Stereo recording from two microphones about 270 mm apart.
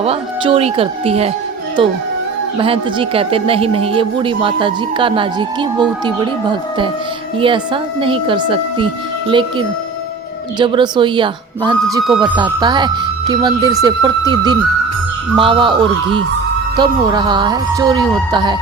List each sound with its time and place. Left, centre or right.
0.0 s speech: right